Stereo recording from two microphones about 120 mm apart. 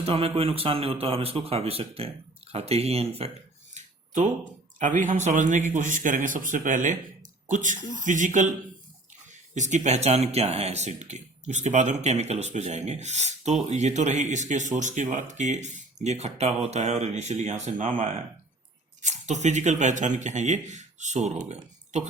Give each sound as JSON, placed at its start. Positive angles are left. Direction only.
{"t": 0.0, "sound": "a man's voice", "side_deg": -55}
{"t": 3.8, "sound": "a sound", "side_deg": -90}
{"t": 4.8, "sound": "a man's voice", "side_deg": -90}
{"t": 9.6, "sound": "speech", "side_deg": -80}
{"t": 19.0, "sound": "speech", "side_deg": -85}